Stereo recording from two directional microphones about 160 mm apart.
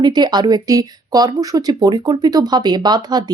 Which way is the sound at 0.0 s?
25° right (ahead or behind).